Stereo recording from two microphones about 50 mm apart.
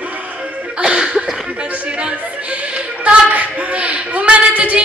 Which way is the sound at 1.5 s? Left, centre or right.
Right.